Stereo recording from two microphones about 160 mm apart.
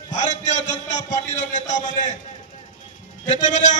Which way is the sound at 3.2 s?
50° left (ahead or behind).